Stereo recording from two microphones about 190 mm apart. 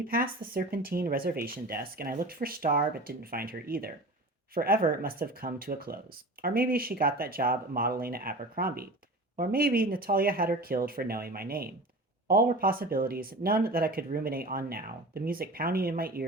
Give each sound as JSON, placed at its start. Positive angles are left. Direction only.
{"t": 0.1, "sound": "speech", "side_deg": -50}